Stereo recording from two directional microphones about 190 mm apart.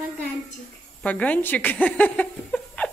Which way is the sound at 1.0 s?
5° left (ahead or behind).